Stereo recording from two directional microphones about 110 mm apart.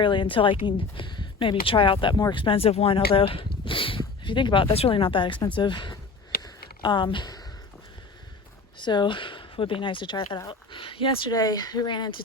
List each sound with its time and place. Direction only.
0.0 s speech: 45° left (ahead or behind)
6.4 s a sound: 45° left (ahead or behind)
8.8 s speech: 45° left (ahead or behind)
11.3 s a woman's voice: 35° left (ahead or behind)